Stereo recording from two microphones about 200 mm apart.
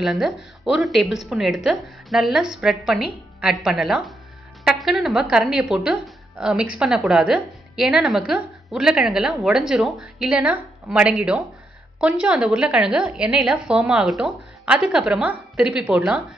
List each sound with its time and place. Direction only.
0.0 s a woman's voice: centre (ahead or behind)